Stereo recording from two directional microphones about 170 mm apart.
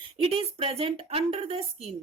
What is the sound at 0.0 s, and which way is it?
Speech, 30° right (ahead or behind).